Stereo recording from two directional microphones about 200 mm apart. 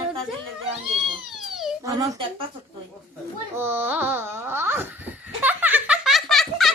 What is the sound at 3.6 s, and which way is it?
Laughter, 10° right (ahead or behind).